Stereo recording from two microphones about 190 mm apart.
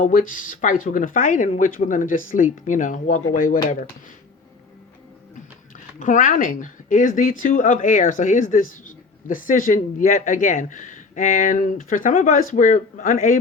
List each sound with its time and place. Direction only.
0.0 s speech: 45° left (ahead or behind)
6.0 s speech: 45° left (ahead or behind)